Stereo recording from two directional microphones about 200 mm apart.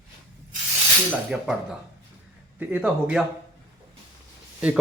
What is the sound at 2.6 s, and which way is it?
Speech, 10° right (ahead or behind).